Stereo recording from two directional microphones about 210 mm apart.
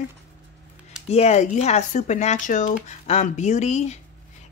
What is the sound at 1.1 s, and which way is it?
A woman's voice, 30° left (ahead or behind).